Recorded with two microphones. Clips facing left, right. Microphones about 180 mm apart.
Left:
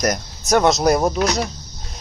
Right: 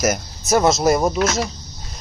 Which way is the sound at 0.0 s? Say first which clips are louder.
Right 1 dB; 5° right (ahead or behind).